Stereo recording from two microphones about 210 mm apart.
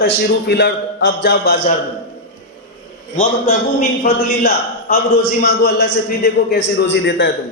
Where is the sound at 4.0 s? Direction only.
45° left (ahead or behind).